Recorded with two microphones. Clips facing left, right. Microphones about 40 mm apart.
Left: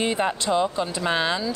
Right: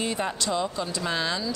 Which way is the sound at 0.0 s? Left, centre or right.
Left.